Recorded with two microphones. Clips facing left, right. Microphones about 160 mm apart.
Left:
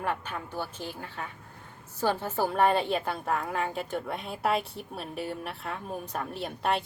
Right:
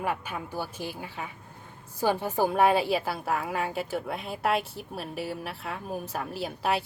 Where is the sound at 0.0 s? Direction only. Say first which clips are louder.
Right 1 dB; 10° right (ahead or behind).